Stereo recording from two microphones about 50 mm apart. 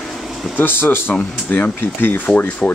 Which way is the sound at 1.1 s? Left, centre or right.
Left.